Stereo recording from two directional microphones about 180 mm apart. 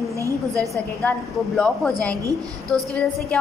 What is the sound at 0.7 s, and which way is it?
A woman's voice, centre (ahead or behind).